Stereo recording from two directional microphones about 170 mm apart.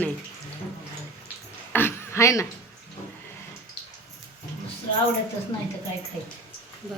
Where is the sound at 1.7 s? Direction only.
15° left (ahead or behind).